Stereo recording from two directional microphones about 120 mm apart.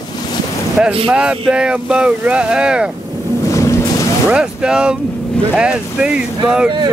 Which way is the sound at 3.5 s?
25° left (ahead or behind).